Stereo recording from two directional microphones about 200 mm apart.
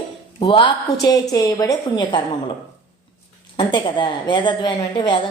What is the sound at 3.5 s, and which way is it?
A woman's voice, 25° left (ahead or behind).